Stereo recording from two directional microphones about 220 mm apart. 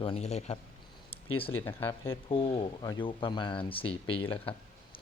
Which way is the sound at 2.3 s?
25° left (ahead or behind).